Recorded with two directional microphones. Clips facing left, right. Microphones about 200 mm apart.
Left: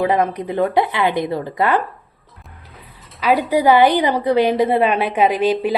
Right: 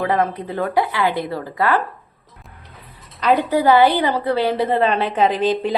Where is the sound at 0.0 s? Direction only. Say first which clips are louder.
Left 2 dB; 15° left (ahead or behind).